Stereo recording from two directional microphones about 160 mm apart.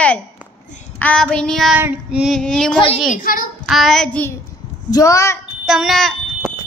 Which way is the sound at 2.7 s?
35° left (ahead or behind).